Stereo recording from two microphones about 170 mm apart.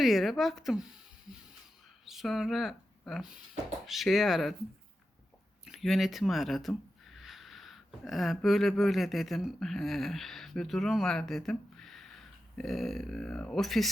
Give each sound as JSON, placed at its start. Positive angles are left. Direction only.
{"t": 0.0, "sound": "speech", "side_deg": 0}
{"t": 5.6, "sound": "speech", "side_deg": 0}